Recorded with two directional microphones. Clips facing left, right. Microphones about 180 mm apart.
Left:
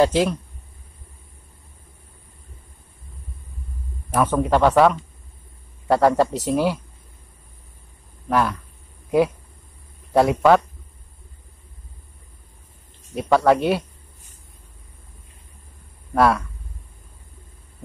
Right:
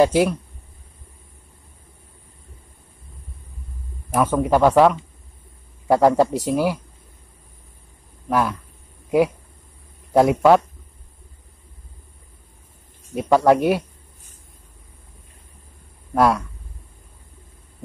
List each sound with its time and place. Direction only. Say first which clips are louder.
0.0 s a man's voice: right 2 dB; 10° right (ahead or behind)
4.1 s a man's voice: right 1 dB; 10° right (ahead or behind)
8.3 s a man's voice: even; 10° right (ahead or behind)
10.1 s a man's voice: right 1 dB; 10° right (ahead or behind)
13.1 s a man's voice: right 1 dB; 15° right (ahead or behind)